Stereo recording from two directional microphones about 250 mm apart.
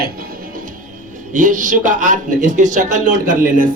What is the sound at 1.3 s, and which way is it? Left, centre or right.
A man's voice, right.